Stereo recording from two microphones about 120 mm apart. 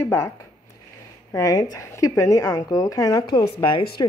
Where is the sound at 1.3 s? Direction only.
30° left (ahead or behind).